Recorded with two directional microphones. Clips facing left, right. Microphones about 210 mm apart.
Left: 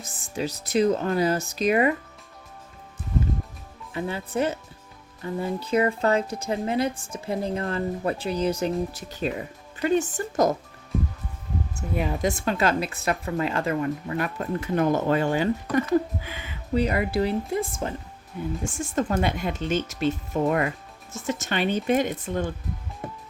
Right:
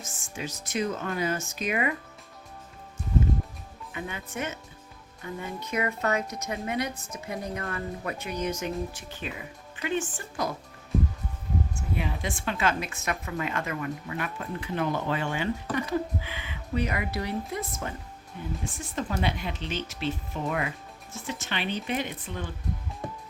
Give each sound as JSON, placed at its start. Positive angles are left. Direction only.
{"t": 0.0, "sound": "a woman's voice", "side_deg": 35}
{"t": 3.9, "sound": "a woman's voice", "side_deg": 35}
{"t": 5.6, "sound": "a woman's voice", "side_deg": 30}
{"t": 11.8, "sound": "a woman's voice", "side_deg": 40}
{"t": 18.6, "sound": "speech", "side_deg": 45}